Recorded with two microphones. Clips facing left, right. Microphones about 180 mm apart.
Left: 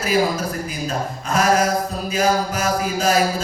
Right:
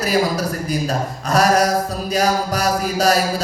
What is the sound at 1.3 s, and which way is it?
Mantra, 40° right (ahead or behind).